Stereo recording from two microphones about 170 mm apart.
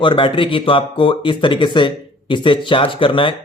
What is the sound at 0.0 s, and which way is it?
A man's voice, 30° left (ahead or behind).